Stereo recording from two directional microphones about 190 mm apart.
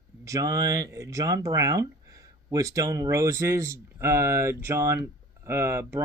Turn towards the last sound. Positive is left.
turn(degrees=-15)  # may be behind; listen again after turning